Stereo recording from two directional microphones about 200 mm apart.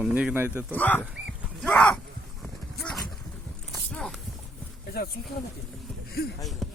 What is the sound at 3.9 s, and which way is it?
Walk, 5° left (ahead or behind).